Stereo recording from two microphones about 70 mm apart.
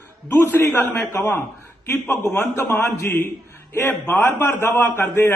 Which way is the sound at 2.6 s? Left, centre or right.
Left.